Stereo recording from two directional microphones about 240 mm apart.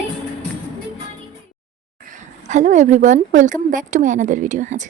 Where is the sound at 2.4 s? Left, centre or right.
Right.